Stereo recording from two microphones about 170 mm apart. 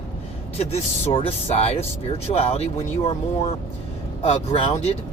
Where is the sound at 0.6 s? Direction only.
35° left (ahead or behind).